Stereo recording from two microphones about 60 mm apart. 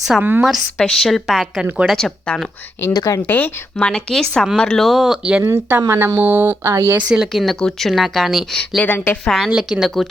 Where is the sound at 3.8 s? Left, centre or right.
Centre.